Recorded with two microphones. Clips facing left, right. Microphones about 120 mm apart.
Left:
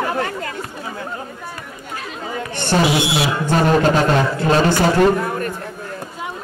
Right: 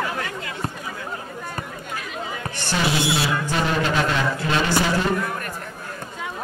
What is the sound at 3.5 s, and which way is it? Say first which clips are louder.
A man's voice: left 8 dB; 45° left (ahead or behind).